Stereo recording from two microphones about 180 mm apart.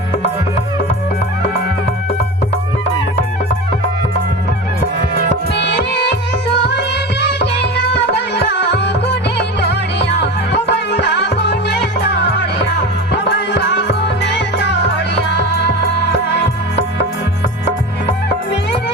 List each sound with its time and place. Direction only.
5.5 s music: 70° left (ahead or behind)